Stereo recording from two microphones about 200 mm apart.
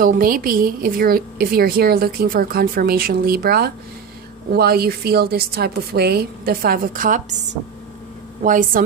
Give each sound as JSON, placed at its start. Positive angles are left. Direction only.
{"t": 0.0, "sound": "a woman's voice", "side_deg": -45}